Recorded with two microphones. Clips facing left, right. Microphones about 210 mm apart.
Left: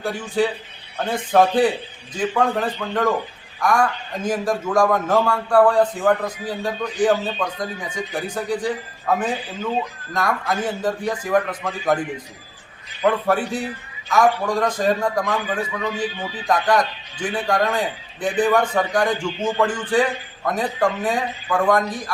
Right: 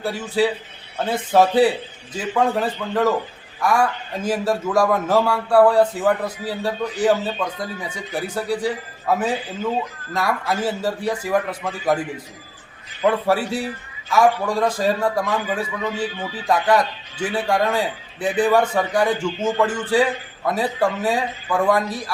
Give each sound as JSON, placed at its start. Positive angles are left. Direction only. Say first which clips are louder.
{"t": 0.0, "sound": "a man's voice", "louder": "right 1 dB", "side_deg": -5}
{"t": 13.0, "sound": "a man's voice", "louder": "even", "side_deg": -10}
{"t": 16.1, "sound": "speech", "louder": "right 1 dB", "side_deg": 15}
{"t": 16.5, "sound": "a man's voice", "louder": "right 1 dB", "side_deg": -10}